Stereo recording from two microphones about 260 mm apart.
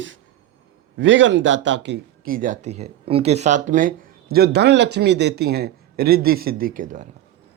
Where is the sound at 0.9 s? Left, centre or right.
Right.